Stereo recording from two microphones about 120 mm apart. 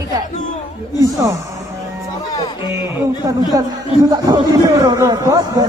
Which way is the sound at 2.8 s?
25° right (ahead or behind).